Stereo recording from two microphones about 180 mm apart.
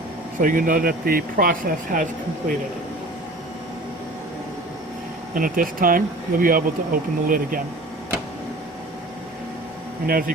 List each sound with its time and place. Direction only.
0.3 s speech: 50° right (ahead or behind)
5.3 s speech: 50° right (ahead or behind)
10.1 s speech: 50° right (ahead or behind)